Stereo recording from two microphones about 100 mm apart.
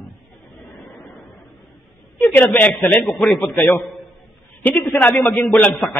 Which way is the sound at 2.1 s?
15° left (ahead or behind).